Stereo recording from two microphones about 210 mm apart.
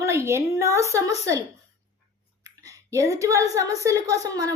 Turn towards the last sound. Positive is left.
turn(degrees=-15)  # may be behind; listen again after turning